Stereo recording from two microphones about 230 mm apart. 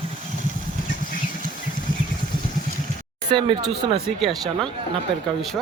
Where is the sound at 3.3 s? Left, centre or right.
Right.